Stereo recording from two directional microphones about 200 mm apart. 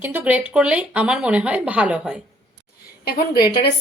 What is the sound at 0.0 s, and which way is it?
Speech, 10° right (ahead or behind).